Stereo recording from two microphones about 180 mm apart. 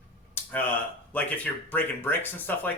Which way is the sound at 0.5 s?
10° left (ahead or behind).